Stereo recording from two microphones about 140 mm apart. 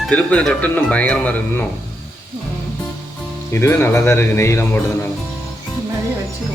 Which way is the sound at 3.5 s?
20° left (ahead or behind).